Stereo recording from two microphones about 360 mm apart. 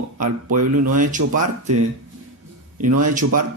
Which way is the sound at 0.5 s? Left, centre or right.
Right.